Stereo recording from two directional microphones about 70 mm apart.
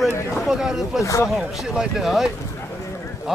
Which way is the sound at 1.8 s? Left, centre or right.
Centre.